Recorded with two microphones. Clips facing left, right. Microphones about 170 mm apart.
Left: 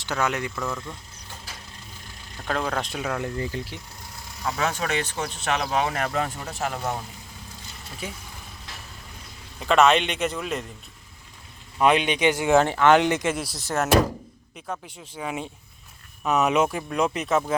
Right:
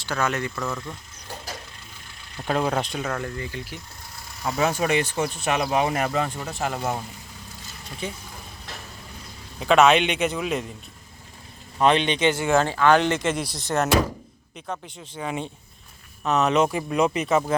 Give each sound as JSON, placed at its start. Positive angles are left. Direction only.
{"t": 0.0, "sound": "speech", "side_deg": 20}
{"t": 0.6, "sound": "a man's voice", "side_deg": -5}
{"t": 2.4, "sound": "speech", "side_deg": -10}
{"t": 2.8, "sound": "speech", "side_deg": 5}
{"t": 3.3, "sound": "speech", "side_deg": 35}
{"t": 4.4, "sound": "speech", "side_deg": -10}
{"t": 8.0, "sound": "speech", "side_deg": 5}
{"t": 9.6, "sound": "a man's voice", "side_deg": 0}
{"t": 11.8, "sound": "speech", "side_deg": 10}
{"t": 13.3, "sound": "a man's voice", "side_deg": 0}
{"t": 16.6, "sound": "a man's voice", "side_deg": 0}